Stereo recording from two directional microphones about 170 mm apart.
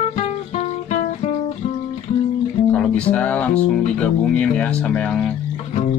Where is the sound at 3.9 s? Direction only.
5° left (ahead or behind).